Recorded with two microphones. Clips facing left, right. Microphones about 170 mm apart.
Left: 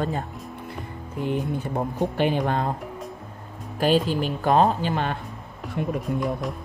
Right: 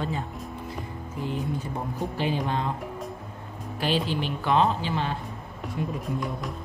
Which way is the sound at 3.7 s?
45° left (ahead or behind).